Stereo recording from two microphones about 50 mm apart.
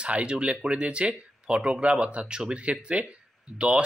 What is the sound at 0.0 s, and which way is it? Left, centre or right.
Speech, right.